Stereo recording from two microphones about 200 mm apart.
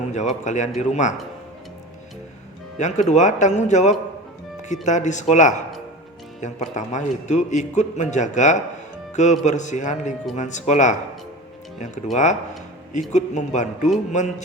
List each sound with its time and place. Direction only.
0.1 s a man's voice: 35° left (ahead or behind)
2.7 s a man's voice: 35° left (ahead or behind)
12.1 s a man's voice: 35° left (ahead or behind)